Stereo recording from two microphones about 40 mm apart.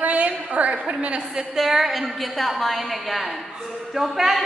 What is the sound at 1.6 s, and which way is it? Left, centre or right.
A woman's voice, centre.